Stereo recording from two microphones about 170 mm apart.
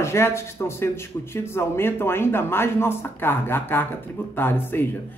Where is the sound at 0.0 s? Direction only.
15° left (ahead or behind).